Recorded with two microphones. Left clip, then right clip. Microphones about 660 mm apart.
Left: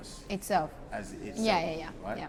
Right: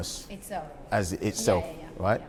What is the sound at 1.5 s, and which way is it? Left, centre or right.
Speech, left.